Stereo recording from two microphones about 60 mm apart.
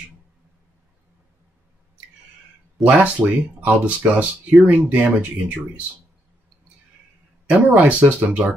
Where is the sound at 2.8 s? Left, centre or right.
Right.